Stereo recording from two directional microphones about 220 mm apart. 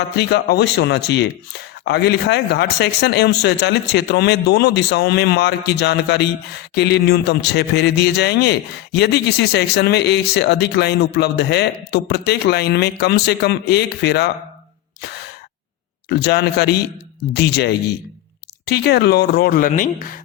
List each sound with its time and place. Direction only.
0.2 s a man's voice: 50° left (ahead or behind)
16.0 s a man's voice: 50° left (ahead or behind)